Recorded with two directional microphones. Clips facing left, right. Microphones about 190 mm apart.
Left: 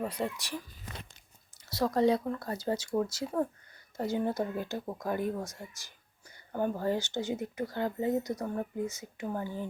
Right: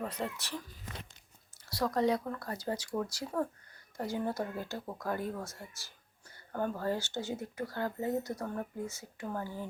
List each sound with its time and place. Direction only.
0.0 s speech: 10° left (ahead or behind)
1.7 s speech: 25° left (ahead or behind)